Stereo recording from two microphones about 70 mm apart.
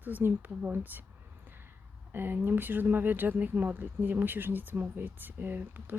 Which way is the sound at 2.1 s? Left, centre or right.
Right.